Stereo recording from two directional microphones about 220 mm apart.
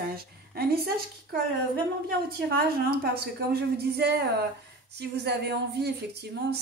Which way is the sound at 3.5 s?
45° right (ahead or behind).